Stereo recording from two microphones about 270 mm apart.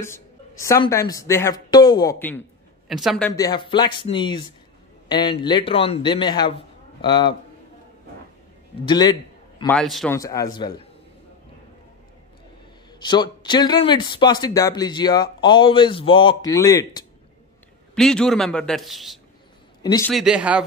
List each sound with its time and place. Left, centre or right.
0.0 s a sound: centre
0.8 s a man's voice: centre
8.8 s speech: centre
9.7 s a man's voice: centre
10.1 s speech: centre
13.0 s a man's voice: centre